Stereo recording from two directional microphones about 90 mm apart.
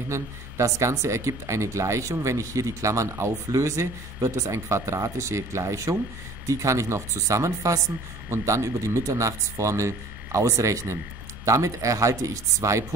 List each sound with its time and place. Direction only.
0.1 s speech: 35° right (ahead or behind)